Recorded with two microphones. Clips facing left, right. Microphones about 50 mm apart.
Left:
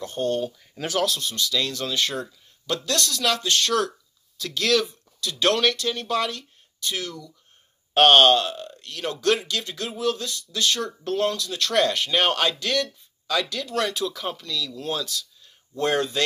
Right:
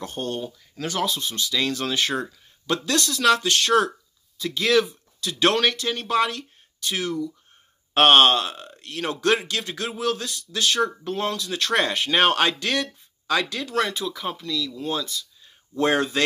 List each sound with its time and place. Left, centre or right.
0.0 s speech: right
1.0 s speech: centre
4.4 s speech: centre
4.7 s speech: right
10.9 s speech: right
13.9 s speech: centre
15.4 s a sound: right